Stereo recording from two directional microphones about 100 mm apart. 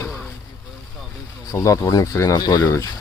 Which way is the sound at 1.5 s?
35° left (ahead or behind).